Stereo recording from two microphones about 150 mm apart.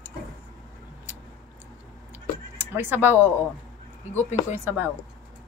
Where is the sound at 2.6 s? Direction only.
15° right (ahead or behind).